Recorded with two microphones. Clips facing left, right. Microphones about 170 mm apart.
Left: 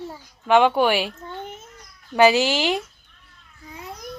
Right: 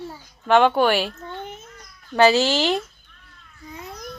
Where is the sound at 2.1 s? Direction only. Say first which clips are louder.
Even; 15° left (ahead or behind).